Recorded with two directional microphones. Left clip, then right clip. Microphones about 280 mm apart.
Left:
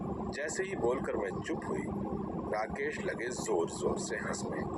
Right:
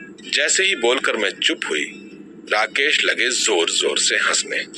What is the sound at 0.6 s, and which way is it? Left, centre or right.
Speech, right.